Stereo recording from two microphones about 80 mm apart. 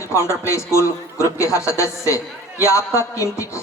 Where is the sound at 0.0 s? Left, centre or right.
Left.